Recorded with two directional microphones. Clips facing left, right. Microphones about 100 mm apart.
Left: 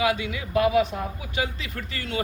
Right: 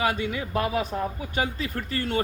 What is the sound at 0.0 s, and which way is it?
Speech, 40° right (ahead or behind).